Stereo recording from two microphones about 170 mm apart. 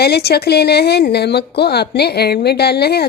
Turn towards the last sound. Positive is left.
turn(degrees=70)  # may be behind; listen again after turning